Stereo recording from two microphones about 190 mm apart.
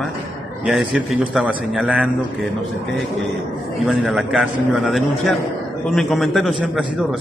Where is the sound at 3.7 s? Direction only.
Centre (ahead or behind).